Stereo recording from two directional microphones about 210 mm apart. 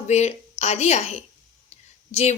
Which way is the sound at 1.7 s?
30° left (ahead or behind).